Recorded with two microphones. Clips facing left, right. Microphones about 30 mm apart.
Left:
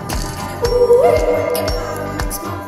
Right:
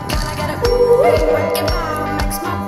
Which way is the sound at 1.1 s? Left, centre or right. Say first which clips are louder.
Even; right.